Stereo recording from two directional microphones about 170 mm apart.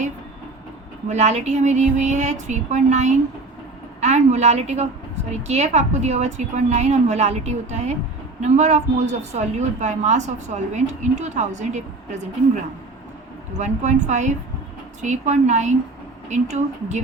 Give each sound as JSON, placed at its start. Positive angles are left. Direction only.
{"t": 1.0, "sound": "a woman's voice", "side_deg": -40}
{"t": 13.6, "sound": "a woman's voice", "side_deg": -45}